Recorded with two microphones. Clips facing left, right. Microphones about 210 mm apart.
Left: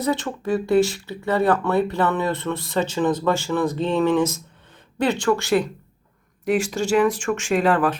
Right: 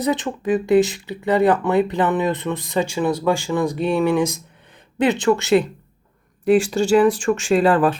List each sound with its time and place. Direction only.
0.0 s speech: 15° right (ahead or behind)